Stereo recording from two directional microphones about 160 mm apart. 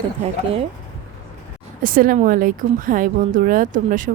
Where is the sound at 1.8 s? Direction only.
60° right (ahead or behind).